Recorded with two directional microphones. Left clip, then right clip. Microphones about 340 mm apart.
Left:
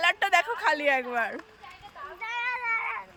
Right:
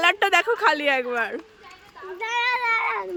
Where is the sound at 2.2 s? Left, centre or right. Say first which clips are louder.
Right 8 dB; centre.